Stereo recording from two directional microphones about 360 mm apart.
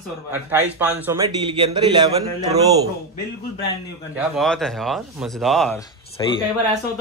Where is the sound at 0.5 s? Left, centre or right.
Centre.